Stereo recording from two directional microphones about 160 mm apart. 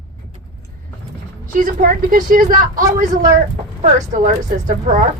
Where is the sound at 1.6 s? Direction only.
55° right (ahead or behind).